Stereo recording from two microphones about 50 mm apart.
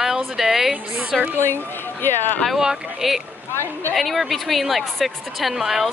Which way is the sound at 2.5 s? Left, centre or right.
Centre.